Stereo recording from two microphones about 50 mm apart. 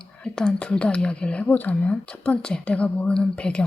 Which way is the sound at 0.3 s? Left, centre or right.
Centre.